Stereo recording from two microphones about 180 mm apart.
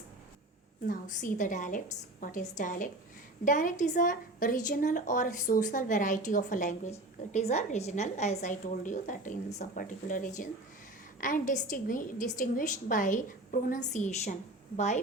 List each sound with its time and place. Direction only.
0.9 s a woman's voice: 45° left (ahead or behind)